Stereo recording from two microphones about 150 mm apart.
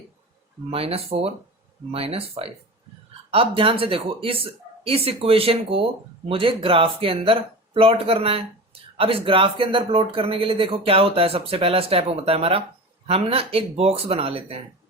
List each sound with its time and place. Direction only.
0.7 s speech: 40° right (ahead or behind)